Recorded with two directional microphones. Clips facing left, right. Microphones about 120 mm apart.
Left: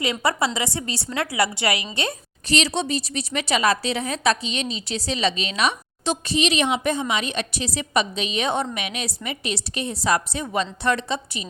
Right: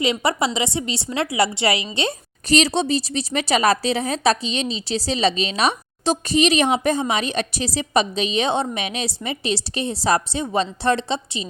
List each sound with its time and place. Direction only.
0.0 s a woman's voice: 25° right (ahead or behind)
2.5 s a woman's voice: 40° right (ahead or behind)